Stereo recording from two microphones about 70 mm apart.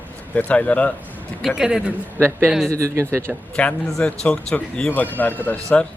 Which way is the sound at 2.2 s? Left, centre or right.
Right.